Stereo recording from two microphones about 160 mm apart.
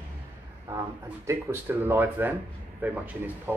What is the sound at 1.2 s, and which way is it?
Speech, 15° right (ahead or behind).